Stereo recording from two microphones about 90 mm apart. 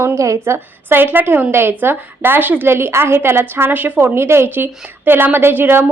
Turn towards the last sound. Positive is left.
turn(degrees=-25)  # may be behind; listen again after turning